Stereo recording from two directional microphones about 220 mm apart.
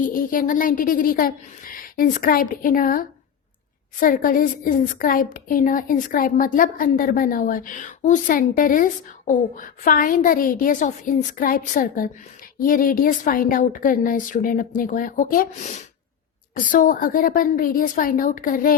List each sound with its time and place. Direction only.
0.0 s a woman's voice: 40° left (ahead or behind)